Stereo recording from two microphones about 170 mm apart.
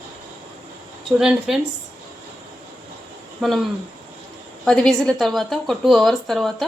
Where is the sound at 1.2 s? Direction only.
Centre (ahead or behind).